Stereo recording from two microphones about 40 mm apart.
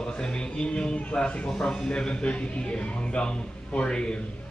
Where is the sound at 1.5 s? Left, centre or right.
Centre.